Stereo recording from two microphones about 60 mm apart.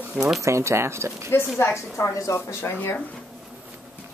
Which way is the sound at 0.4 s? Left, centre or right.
Right.